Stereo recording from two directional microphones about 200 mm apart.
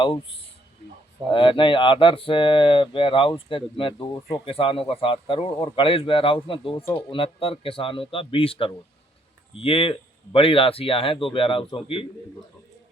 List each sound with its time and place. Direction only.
1.3 s speech: 25° left (ahead or behind)